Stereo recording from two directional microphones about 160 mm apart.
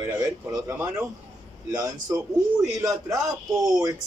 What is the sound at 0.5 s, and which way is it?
A man's voice, 15° right (ahead or behind).